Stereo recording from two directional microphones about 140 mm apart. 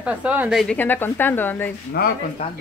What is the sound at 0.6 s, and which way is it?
A woman's voice, 10° left (ahead or behind).